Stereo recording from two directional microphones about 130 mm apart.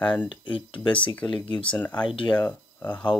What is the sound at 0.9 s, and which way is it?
Speech, 40° left (ahead or behind).